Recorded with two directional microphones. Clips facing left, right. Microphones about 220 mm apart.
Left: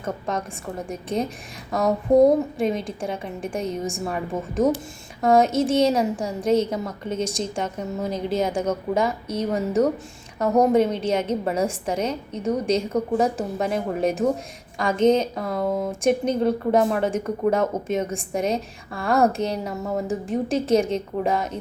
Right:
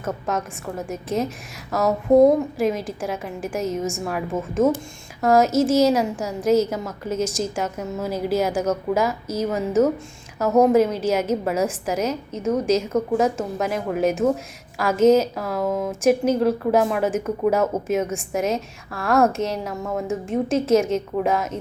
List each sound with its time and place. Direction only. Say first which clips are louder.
0.9 s a woman's voice: right 1 dB; centre (ahead or behind)
12.6 s a woman's voice: right 2 dB; 30° left (ahead or behind)
13.1 s a woman's voice: even; centre (ahead or behind)